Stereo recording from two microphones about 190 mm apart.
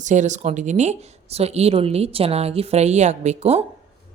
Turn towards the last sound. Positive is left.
turn(degrees=-35)  # may be behind; listen again after turning